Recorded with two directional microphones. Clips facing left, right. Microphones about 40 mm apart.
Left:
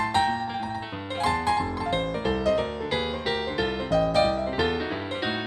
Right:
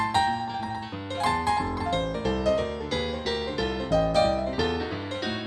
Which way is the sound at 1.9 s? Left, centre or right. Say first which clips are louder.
Left 1 dB; left.